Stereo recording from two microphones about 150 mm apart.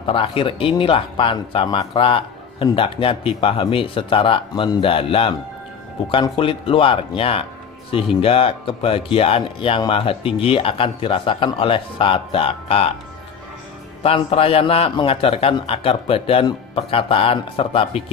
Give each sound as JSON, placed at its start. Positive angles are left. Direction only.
{"t": 0.0, "sound": "a man's voice", "side_deg": 35}
{"t": 6.3, "sound": "a man's voice", "side_deg": 35}
{"t": 14.0, "sound": "a man's voice", "side_deg": 40}